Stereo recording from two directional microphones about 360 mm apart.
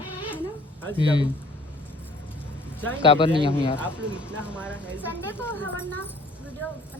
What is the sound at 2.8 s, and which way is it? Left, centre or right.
Speech, centre.